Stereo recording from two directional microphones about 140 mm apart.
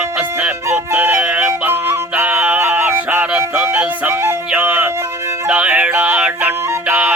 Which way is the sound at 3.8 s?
10° right (ahead or behind).